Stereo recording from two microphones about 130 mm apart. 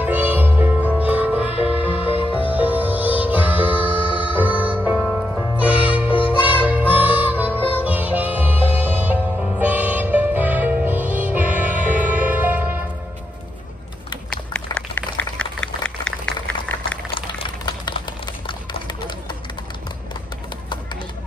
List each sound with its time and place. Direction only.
0.0 s music: 15° right (ahead or behind)
1.9 s music: 45° left (ahead or behind)
2.5 s music: 10° right (ahead or behind)
4.0 s music: 40° left (ahead or behind)
4.4 s music: 10° right (ahead or behind)
15.1 s a sound: 10° left (ahead or behind)
17.1 s a sound: 40° left (ahead or behind)